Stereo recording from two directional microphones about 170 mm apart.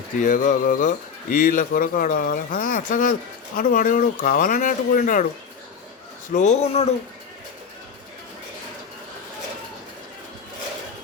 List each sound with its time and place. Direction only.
0.2 s speech: 50° left (ahead or behind)
6.3 s speech: 45° left (ahead or behind)